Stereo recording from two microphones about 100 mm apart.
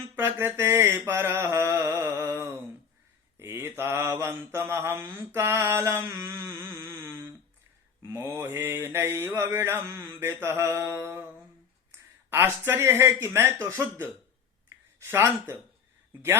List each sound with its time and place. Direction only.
0.0 s mantra: 25° right (ahead or behind)
6.3 s music: 25° right (ahead or behind)
8.0 s mantra: 20° right (ahead or behind)
12.3 s mantra: 20° right (ahead or behind)
14.7 s speech: 25° right (ahead or behind)